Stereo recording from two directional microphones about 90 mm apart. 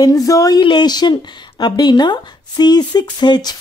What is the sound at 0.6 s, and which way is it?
Speech, 55° left (ahead or behind).